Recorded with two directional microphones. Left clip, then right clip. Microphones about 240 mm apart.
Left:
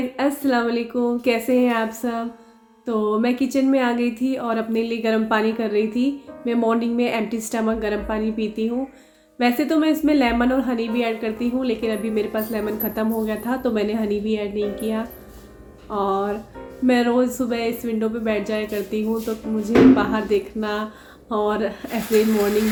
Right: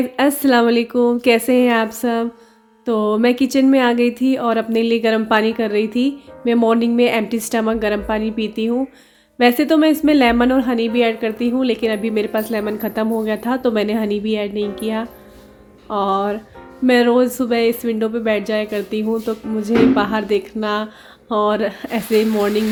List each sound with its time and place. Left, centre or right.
0.2 s a woman's voice: right